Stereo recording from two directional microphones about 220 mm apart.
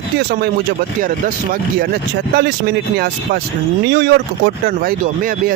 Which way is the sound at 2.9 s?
45° right (ahead or behind).